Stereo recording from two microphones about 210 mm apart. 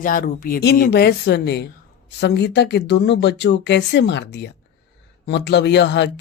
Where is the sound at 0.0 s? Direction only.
40° left (ahead or behind).